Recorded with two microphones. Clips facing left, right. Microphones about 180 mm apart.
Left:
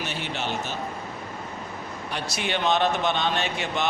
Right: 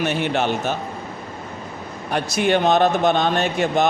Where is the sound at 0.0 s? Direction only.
55° right (ahead or behind).